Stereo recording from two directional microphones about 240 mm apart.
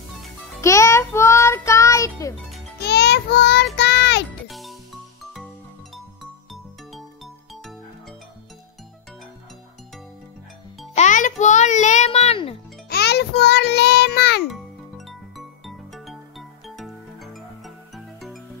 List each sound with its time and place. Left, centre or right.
0.6 s music: centre
2.8 s child singing: left
4.5 s music: centre
11.0 s music: left
12.9 s music: left
14.5 s music: centre